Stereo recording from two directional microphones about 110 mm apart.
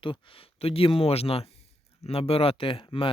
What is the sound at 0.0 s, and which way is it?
Speech, 55° left (ahead or behind).